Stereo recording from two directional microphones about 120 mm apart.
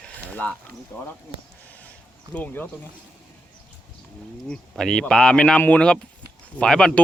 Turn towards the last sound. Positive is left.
turn(degrees=5)  # may be behind; listen again after turning